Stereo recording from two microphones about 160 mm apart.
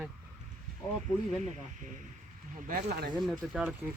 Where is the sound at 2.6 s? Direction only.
60° right (ahead or behind).